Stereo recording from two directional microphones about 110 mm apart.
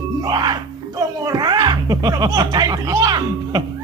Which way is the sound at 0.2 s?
40° right (ahead or behind).